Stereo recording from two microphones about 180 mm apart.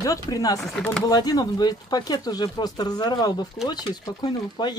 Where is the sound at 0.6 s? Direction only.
5° left (ahead or behind).